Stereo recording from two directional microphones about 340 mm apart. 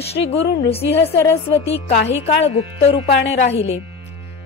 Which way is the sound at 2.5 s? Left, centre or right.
Centre.